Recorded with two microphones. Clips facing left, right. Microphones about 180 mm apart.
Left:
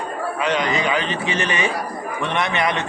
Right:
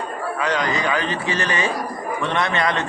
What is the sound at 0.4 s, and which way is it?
A man's voice, 20° left (ahead or behind).